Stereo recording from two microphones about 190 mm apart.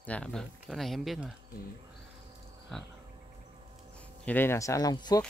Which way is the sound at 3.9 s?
5° left (ahead or behind).